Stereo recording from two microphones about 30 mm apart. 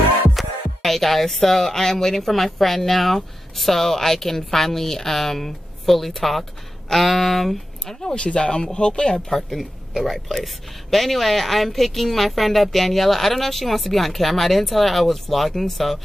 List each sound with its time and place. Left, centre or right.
0.3 s speech: centre
7.8 s speech: centre
8.1 s speech: left
9.3 s speech: centre